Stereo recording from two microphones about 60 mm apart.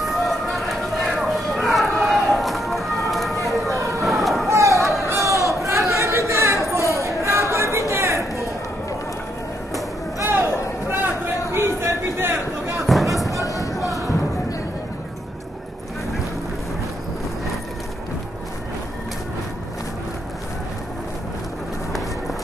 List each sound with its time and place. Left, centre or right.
0.0 s run: centre
3.4 s vehicle: centre
3.7 s vehicle: right
4.0 s vehicle: centre
4.5 s a sound: right
5.0 s crowd: right
5.7 s chatter: right
6.7 s a sound: right
10.2 s a sound: right
11.5 s a sound: right
12.8 s music: centre
13.4 s music: left
13.7 s music: centre